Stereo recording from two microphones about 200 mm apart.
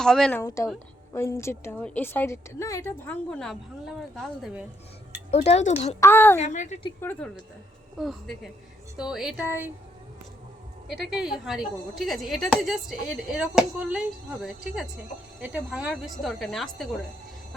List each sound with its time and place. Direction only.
0.0 s a woman's voice: 5° left (ahead or behind)
0.4 s a woman's voice: 15° left (ahead or behind); by 4.6 s centre (ahead or behind)
5.3 s speech: 30° left (ahead or behind)
6.0 s a woman's voice: 10° left (ahead or behind)
6.4 s speech: 35° left (ahead or behind)
7.0 s a woman's voice: 10° left (ahead or behind); by 9.7 s 10° right (ahead or behind)
10.8 s a woman's voice: 5° right (ahead or behind)
15.4 s a woman's voice: 10° right (ahead or behind)